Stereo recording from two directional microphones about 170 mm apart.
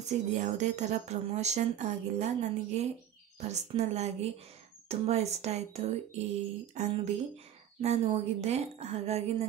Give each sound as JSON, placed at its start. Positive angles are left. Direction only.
{"t": 0.1, "sound": "speech", "side_deg": -45}